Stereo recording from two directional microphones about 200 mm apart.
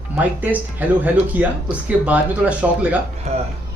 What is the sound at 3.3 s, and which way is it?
Speech, 30° right (ahead or behind).